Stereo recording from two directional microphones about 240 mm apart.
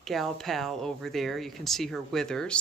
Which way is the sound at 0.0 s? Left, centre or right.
Centre.